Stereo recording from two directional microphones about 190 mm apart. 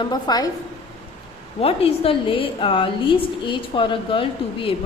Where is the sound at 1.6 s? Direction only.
30° left (ahead or behind).